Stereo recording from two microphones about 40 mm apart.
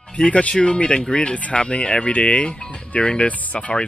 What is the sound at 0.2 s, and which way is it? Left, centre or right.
Speech, left.